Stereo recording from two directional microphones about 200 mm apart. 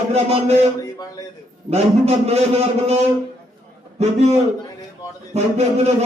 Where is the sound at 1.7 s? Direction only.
30° right (ahead or behind).